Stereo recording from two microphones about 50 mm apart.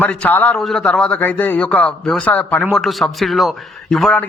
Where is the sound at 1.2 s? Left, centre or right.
Left.